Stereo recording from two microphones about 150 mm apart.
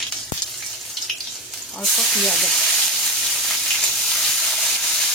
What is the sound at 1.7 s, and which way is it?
Frying, centre (ahead or behind).